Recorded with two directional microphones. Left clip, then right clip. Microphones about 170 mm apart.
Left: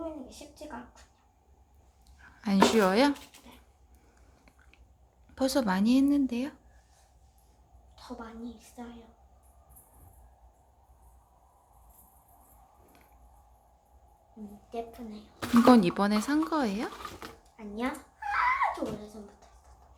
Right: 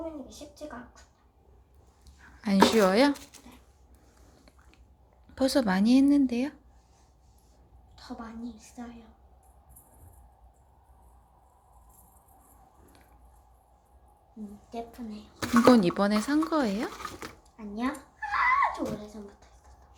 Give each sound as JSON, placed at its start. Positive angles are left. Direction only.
{"t": 2.2, "sound": "a sound", "side_deg": -5}
{"t": 2.6, "sound": "speech", "side_deg": 0}
{"t": 5.3, "sound": "speech", "side_deg": -10}
{"t": 7.9, "sound": "a woman's voice", "side_deg": 10}
{"t": 14.7, "sound": "speech", "side_deg": 0}
{"t": 16.9, "sound": "speech", "side_deg": -40}
{"t": 17.7, "sound": "a sound", "side_deg": 10}